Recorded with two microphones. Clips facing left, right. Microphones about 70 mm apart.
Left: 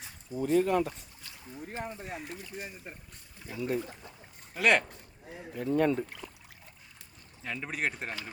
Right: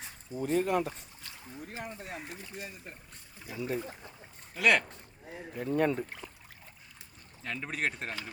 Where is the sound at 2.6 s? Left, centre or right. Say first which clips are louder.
Even; left.